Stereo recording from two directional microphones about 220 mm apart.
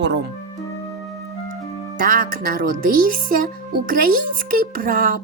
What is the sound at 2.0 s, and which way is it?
Speech, 40° right (ahead or behind).